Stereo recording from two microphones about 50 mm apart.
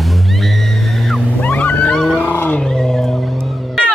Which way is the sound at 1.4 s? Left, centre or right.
Left.